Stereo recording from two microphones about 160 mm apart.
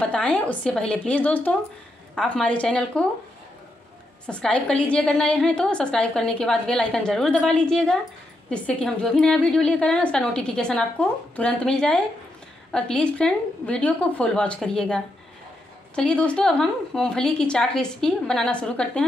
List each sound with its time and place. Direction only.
0.0 s speech: 5° left (ahead or behind)
4.3 s a woman's voice: 5° left (ahead or behind)